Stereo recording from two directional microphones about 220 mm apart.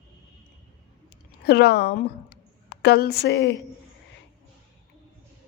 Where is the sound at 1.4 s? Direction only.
45° left (ahead or behind).